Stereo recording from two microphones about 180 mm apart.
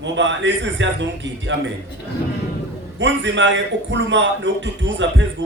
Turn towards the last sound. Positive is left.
turn(degrees=-90)